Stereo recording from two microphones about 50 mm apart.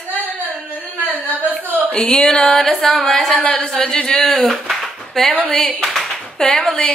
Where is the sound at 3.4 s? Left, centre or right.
Left.